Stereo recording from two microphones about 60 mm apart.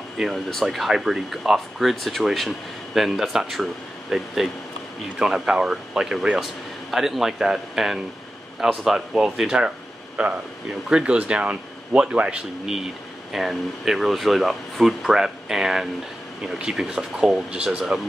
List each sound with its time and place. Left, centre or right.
0.2 s speech: centre
9.6 s a sound: centre
10.7 s speech: centre
13.3 s speech: centre